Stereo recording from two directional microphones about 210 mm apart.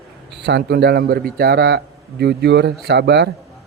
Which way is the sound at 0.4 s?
50° right (ahead or behind).